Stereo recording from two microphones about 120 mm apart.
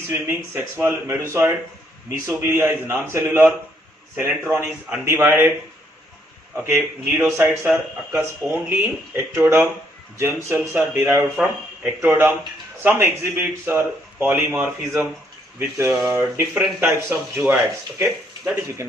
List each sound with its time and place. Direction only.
0.1 s speech: 20° right (ahead or behind)
6.5 s speech: 15° right (ahead or behind)